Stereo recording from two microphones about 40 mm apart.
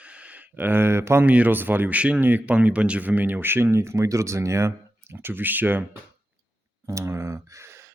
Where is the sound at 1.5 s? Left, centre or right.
Right.